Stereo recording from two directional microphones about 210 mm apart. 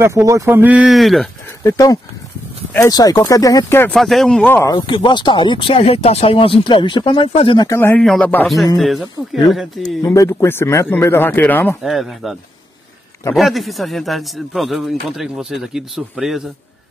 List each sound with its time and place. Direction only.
0.0 s speech: 15° right (ahead or behind)
1.6 s speech: 15° left (ahead or behind); by 9.8 s centre (ahead or behind)
10.0 s speech: 15° left (ahead or behind)
13.4 s speech: centre (ahead or behind)